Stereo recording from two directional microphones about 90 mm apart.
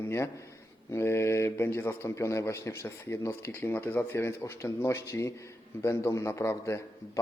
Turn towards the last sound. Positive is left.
turn(degrees=30)  # may be behind; listen again after turning